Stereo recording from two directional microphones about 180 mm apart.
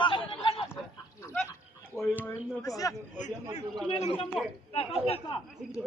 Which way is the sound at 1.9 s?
5° left (ahead or behind).